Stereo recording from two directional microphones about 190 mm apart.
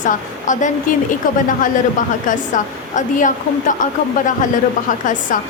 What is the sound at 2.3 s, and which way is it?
A woman's voice, 40° left (ahead or behind).